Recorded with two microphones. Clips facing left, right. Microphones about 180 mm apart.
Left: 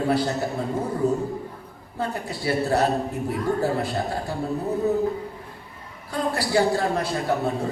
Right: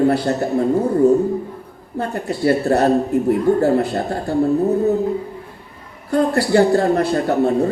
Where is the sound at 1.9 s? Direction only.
60° right (ahead or behind).